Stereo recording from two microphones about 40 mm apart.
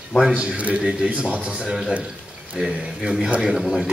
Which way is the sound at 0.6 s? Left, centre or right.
Right.